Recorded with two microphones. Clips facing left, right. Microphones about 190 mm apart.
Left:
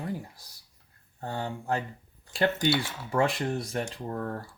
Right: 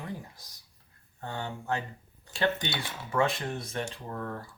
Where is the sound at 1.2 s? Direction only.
35° left (ahead or behind).